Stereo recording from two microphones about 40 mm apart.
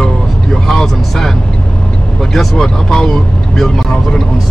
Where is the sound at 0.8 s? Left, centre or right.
Centre.